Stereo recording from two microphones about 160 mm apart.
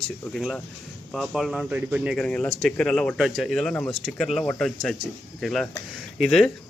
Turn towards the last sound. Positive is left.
turn(degrees=0)  # may be behind; listen again after turning